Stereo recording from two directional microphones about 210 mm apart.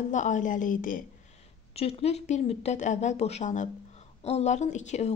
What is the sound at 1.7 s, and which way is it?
Speech, 30° left (ahead or behind).